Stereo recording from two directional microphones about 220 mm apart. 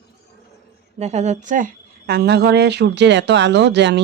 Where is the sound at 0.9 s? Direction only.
30° right (ahead or behind); by 4.0 s 50° right (ahead or behind).